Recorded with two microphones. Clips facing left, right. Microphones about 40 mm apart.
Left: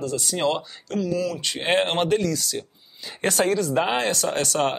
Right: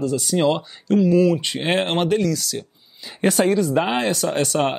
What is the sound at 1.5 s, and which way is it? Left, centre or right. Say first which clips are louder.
Speech: right 1 dB; centre.